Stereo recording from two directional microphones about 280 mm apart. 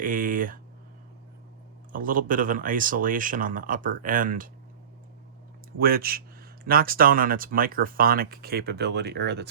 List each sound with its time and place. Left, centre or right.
0.0 s speech: right
1.9 s speech: right
5.8 s speech: right